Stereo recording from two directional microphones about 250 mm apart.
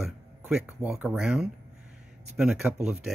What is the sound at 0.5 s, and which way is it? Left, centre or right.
Speech, centre.